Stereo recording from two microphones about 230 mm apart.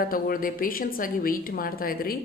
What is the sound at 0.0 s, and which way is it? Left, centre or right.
A woman's voice, left.